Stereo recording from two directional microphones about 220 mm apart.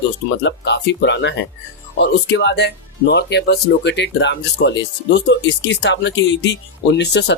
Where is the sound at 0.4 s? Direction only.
50° left (ahead or behind).